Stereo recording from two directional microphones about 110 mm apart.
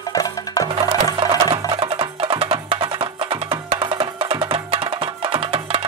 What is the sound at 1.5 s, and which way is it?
Music, 50° right (ahead or behind).